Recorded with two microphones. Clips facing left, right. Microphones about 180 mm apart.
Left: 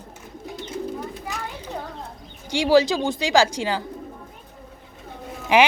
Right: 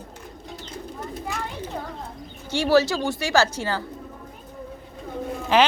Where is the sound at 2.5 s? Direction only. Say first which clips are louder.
Left 2 dB; 15° left (ahead or behind).